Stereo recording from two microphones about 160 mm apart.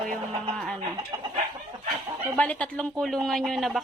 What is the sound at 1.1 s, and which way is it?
Chicken, 25° right (ahead or behind).